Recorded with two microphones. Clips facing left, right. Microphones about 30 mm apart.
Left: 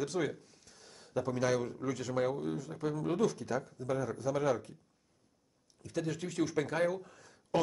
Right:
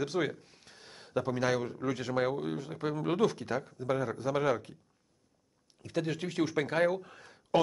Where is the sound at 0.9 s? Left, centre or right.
Right.